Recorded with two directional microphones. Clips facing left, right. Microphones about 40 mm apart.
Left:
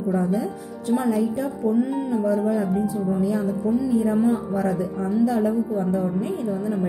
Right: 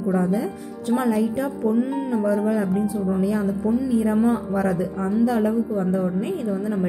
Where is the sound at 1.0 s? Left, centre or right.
Right.